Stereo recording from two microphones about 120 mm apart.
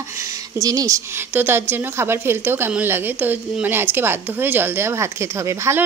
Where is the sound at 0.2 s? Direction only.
30° right (ahead or behind).